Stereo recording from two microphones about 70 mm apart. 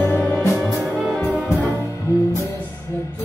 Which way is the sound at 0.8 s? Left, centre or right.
Centre.